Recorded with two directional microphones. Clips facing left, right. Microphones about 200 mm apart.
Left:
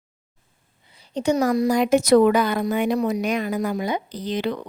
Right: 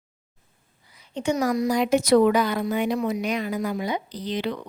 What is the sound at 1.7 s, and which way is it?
Speech, 50° left (ahead or behind).